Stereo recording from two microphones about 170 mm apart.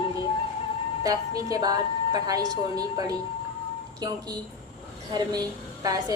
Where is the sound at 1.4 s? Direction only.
20° right (ahead or behind).